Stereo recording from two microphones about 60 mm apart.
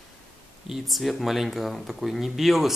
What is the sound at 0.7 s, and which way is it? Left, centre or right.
Speech, centre.